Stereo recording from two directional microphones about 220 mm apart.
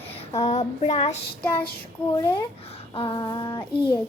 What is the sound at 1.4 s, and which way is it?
Speech, 5° left (ahead or behind).